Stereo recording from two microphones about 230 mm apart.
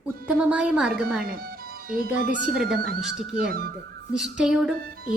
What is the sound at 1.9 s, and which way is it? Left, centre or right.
Speech, right.